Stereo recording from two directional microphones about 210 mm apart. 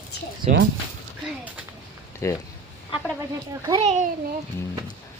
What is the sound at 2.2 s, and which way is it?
Speech, 10° left (ahead or behind).